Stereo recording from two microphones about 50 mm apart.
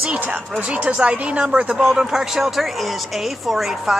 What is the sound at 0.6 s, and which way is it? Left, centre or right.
Speech, right.